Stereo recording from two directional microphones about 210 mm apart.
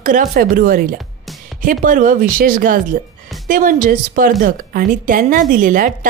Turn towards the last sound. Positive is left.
turn(degrees=-40)  # may be behind; listen again after turning